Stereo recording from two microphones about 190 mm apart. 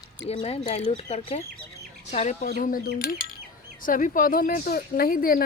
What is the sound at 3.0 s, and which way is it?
Bird, 50° left (ahead or behind).